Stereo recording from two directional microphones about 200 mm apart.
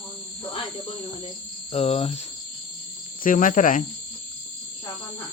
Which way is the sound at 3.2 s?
40° left (ahead or behind).